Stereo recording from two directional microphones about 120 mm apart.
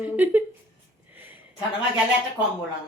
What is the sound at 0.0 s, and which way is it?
Speech, 15° right (ahead or behind).